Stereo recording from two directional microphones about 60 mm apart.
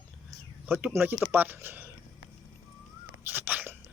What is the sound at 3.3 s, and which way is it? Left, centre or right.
Speech, right.